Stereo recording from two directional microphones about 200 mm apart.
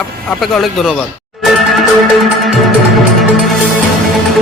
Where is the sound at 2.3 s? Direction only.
Centre (ahead or behind).